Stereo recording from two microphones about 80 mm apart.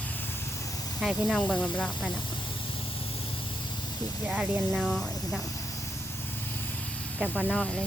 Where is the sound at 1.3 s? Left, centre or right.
Centre.